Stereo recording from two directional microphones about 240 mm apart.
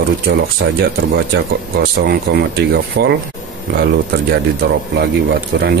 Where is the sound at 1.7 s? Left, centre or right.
Right.